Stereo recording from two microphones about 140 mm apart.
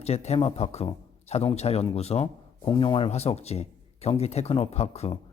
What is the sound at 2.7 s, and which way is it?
Speech, 35° left (ahead or behind).